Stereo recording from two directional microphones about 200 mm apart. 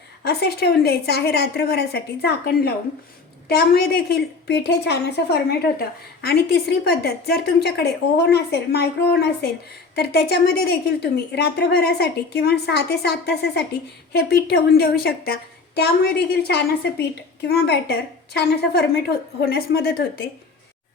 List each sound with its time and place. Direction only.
0.3 s a woman's voice: 55° left (ahead or behind)